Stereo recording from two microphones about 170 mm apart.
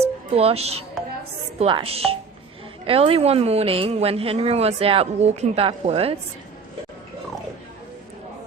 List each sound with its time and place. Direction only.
0.3 s a woman's voice: 35° right (ahead or behind)